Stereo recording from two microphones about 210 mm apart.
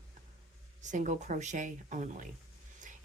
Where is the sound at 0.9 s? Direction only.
35° right (ahead or behind).